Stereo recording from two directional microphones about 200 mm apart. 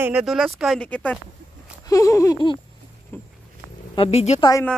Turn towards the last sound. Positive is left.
turn(degrees=30)  # may be behind; listen again after turning